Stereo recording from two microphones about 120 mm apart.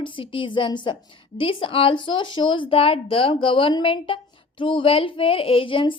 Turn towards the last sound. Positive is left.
turn(degrees=45)  # may be behind; listen again after turning